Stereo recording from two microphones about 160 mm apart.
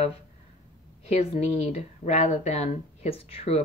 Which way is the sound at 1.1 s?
40° left (ahead or behind).